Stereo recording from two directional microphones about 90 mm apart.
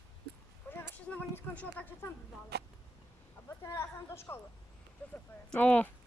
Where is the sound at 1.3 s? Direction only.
25° left (ahead or behind).